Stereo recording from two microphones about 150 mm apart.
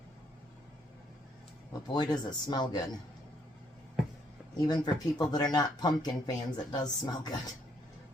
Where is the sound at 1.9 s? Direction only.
30° left (ahead or behind).